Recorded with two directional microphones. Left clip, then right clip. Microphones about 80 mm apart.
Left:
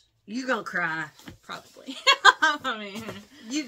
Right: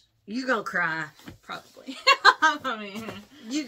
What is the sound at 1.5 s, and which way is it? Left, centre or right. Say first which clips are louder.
A woman's voice: right 1 dB; left.